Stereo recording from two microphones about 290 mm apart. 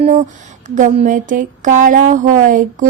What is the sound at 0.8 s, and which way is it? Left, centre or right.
A woman's voice, right.